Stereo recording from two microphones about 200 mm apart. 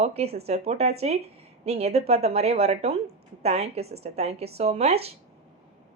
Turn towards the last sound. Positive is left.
turn(degrees=-30)  # may be behind; listen again after turning